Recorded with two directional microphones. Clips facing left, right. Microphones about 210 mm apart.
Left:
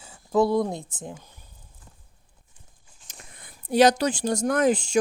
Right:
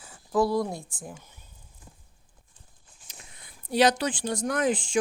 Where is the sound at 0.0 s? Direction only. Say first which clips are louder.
Left 3 dB; 25° left (ahead or behind).